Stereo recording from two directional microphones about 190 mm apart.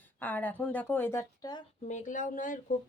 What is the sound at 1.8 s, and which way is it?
Speech, 40° left (ahead or behind).